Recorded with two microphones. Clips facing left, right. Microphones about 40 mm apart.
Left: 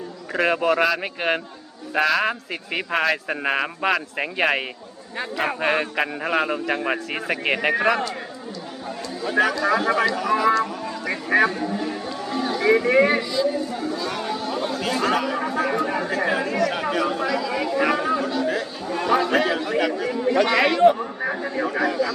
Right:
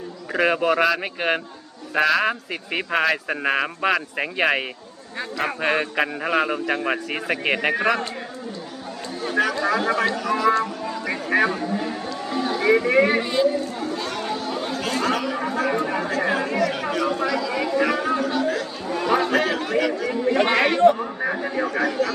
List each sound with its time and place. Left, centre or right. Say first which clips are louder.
0.3 s a man's voice: even; centre
9.3 s a man's voice: left 2 dB; centre
10.6 s music: even; centre
13.4 s speech: right 4 dB; right
14.3 s chatter: left 1 dB; centre
15.0 s a man's voice: left 2 dB; centre
18.4 s chatter: even; centre
19.3 s speech: even; centre
20.1 s speech: even; centre
20.4 s speech: left 1 dB; right
21.0 s chatter: right 1 dB; centre